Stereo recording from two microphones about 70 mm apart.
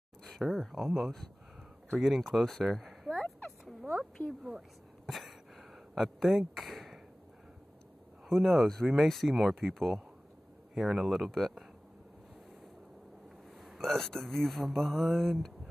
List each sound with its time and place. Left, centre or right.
0.2 s speech: centre
2.0 s a sound: centre
4.4 s speech: centre
5.0 s a sound: centre
8.3 s speech: centre
13.7 s speech: centre